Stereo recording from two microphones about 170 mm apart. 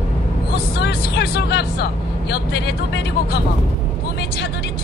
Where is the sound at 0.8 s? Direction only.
70° left (ahead or behind).